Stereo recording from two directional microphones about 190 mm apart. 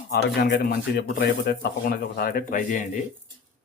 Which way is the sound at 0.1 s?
60° left (ahead or behind).